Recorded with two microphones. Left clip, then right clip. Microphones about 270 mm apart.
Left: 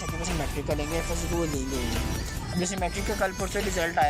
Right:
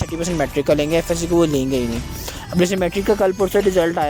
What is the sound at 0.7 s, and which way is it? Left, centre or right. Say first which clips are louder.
Speech: right 13 dB; right.